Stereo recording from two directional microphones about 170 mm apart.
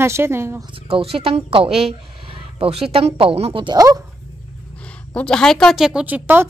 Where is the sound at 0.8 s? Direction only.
35° right (ahead or behind).